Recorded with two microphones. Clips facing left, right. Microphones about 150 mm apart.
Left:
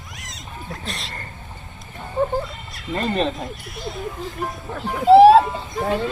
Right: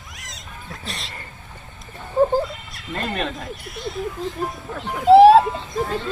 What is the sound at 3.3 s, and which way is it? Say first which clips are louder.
A child's voice: left 1 dB; centre (ahead or behind).